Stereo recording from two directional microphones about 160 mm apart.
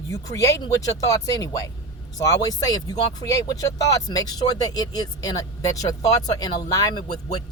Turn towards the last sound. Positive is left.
turn(degrees=25)  # may be behind; listen again after turning